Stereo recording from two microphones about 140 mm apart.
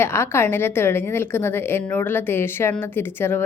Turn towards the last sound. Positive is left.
turn(degrees=15)  # may be behind; listen again after turning